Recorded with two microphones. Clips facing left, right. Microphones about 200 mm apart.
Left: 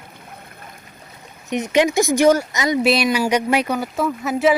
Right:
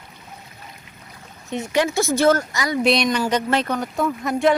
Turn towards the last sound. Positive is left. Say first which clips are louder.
# left 1 dB
turn(degrees=5)  # may be behind; listen again after turning